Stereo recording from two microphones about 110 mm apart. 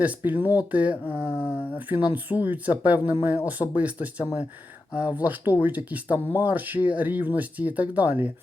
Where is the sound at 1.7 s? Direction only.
15° right (ahead or behind).